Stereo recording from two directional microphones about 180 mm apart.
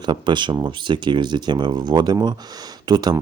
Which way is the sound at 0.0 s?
25° right (ahead or behind).